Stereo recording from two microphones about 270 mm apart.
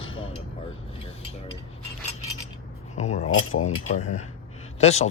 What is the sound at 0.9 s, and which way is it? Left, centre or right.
Cutlery, left.